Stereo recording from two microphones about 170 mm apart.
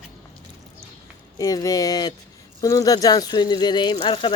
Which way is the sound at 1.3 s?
20° left (ahead or behind).